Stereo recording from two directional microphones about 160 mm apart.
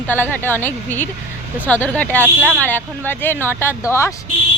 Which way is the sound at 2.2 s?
10° right (ahead or behind).